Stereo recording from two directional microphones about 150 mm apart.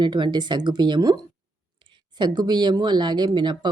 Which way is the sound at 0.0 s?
30° right (ahead or behind).